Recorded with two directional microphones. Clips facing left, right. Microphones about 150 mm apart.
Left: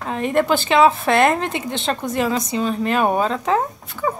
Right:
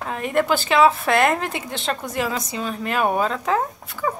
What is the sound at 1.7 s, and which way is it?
Speech, 25° left (ahead or behind).